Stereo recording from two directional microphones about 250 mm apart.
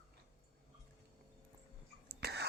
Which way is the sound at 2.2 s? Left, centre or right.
Right.